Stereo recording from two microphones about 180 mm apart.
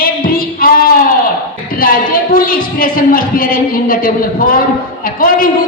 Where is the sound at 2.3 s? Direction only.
50° left (ahead or behind).